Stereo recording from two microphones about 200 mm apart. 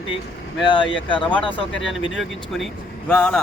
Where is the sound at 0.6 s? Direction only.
25° left (ahead or behind).